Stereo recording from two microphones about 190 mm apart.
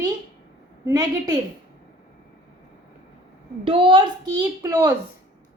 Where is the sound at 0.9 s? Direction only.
20° right (ahead or behind).